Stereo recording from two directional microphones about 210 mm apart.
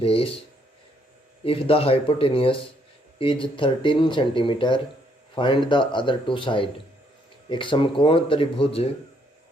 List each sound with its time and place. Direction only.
0.0 s speech: 25° left (ahead or behind)
1.5 s speech: 25° left (ahead or behind)